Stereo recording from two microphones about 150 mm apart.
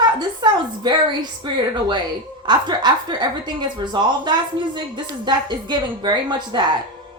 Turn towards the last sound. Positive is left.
turn(degrees=-30)  # may be behind; listen again after turning